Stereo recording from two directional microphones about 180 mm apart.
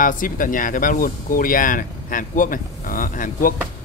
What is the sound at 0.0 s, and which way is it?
Speech, 50° left (ahead or behind).